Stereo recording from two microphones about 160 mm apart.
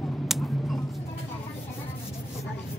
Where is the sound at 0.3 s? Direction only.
Centre (ahead or behind).